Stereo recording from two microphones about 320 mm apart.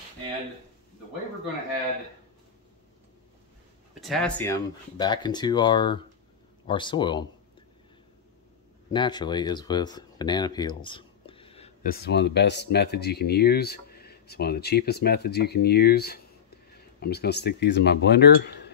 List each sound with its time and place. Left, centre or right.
4.0 s speech: centre
8.9 s speech: centre; by 18.7 s left